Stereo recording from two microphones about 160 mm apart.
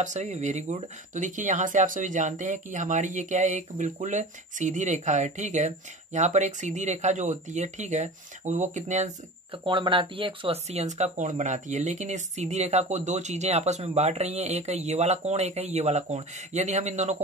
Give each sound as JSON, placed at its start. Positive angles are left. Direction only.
{"t": 0.0, "sound": "speech", "side_deg": -50}
{"t": 9.5, "sound": "speech", "side_deg": -30}